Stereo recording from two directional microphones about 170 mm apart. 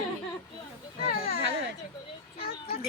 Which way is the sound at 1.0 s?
65° left (ahead or behind).